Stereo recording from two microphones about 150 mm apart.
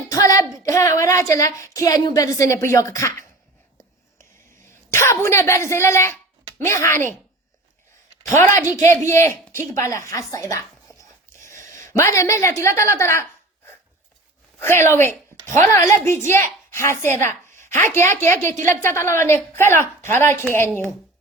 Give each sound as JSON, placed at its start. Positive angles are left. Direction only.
{"t": 0.1, "sound": "a sound", "side_deg": 20}
{"t": 0.6, "sound": "a woman's voice", "side_deg": 20}
{"t": 4.9, "sound": "a woman's voice", "side_deg": 15}
{"t": 8.9, "sound": "a woman's voice", "side_deg": 20}
{"t": 11.4, "sound": "a woman's voice", "side_deg": 20}
{"t": 14.6, "sound": "a woman's voice", "side_deg": 15}